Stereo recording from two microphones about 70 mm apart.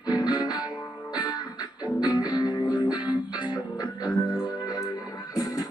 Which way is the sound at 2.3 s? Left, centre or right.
Left.